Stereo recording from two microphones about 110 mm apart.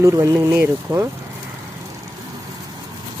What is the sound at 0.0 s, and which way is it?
Speech, 25° right (ahead or behind).